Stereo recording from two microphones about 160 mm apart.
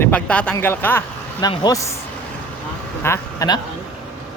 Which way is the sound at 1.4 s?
25° left (ahead or behind).